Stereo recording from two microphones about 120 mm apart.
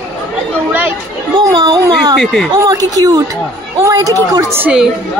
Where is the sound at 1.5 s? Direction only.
40° right (ahead or behind).